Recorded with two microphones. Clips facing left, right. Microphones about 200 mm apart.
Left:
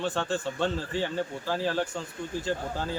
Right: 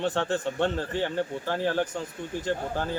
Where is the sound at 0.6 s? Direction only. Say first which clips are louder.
Right 2 dB; 60° right (ahead or behind).